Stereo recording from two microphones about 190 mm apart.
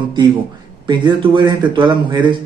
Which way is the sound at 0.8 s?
25° right (ahead or behind).